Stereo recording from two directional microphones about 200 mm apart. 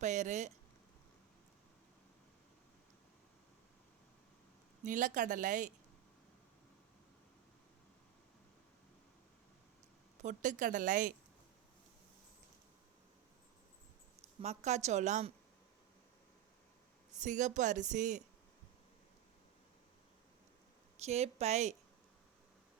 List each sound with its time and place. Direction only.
0.0 s speech: 35° right (ahead or behind)
4.8 s speech: 40° right (ahead or behind)
10.2 s speech: 35° right (ahead or behind)
14.4 s speech: 35° right (ahead or behind)
17.2 s speech: 40° right (ahead or behind)
20.9 s speech: 35° right (ahead or behind)